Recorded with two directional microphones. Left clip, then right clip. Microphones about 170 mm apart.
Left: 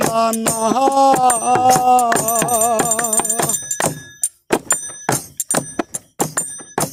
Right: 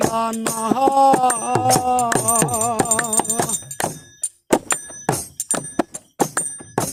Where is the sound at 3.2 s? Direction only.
40° left (ahead or behind).